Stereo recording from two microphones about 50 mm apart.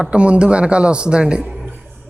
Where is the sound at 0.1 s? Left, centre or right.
Right.